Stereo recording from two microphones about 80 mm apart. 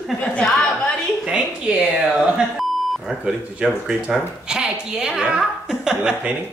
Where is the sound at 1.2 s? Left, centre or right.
Centre.